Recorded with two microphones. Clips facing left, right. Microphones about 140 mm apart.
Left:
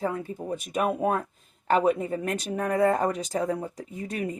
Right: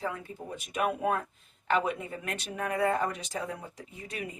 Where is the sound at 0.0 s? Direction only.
40° left (ahead or behind).